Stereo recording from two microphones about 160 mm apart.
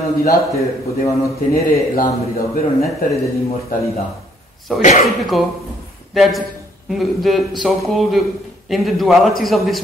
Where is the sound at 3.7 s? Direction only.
60° left (ahead or behind).